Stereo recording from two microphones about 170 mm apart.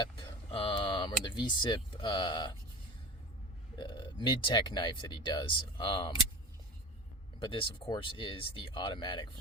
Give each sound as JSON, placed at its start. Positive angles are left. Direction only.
{"t": 0.0, "sound": "speech", "side_deg": 25}
{"t": 3.8, "sound": "speech", "side_deg": 25}
{"t": 7.4, "sound": "speech", "side_deg": 30}